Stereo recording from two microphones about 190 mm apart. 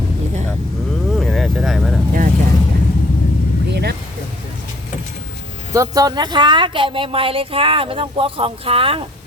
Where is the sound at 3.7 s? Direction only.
60° right (ahead or behind).